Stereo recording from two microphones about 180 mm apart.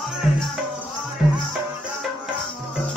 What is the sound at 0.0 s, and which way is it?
Music, centre (ahead or behind).